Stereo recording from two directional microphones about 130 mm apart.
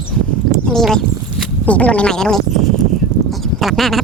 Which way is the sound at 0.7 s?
5° left (ahead or behind).